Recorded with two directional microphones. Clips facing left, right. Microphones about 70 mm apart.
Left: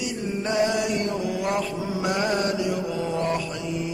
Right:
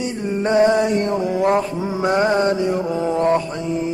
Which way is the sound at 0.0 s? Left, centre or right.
Right.